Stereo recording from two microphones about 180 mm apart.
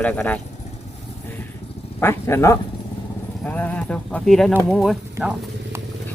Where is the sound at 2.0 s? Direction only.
15° left (ahead or behind).